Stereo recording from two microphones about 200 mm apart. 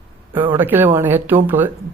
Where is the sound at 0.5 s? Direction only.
10° right (ahead or behind).